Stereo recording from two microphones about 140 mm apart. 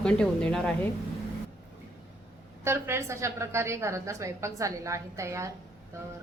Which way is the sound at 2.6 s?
20° right (ahead or behind).